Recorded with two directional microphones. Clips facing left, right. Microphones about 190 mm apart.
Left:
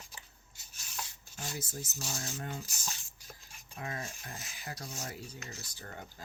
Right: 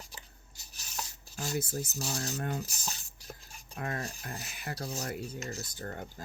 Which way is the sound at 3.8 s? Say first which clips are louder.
Right 4 dB; 60° right (ahead or behind).